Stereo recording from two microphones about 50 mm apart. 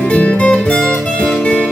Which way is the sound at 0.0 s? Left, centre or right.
Left.